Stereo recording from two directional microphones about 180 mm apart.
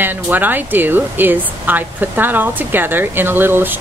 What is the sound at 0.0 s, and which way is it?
Speech, 10° right (ahead or behind).